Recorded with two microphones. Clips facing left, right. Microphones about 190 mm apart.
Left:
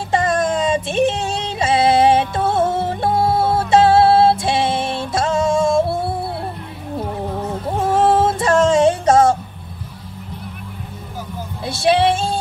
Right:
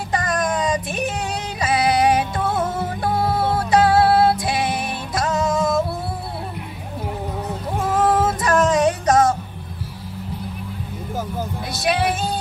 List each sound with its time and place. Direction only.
0.1 s music: 25° left (ahead or behind)
7.8 s music: 25° left (ahead or behind)
11.7 s music: 30° left (ahead or behind)